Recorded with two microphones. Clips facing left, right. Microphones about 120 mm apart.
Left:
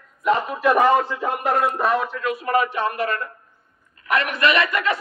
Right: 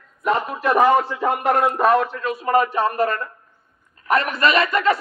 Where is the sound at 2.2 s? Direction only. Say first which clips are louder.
Right 1 dB; 30° right (ahead or behind).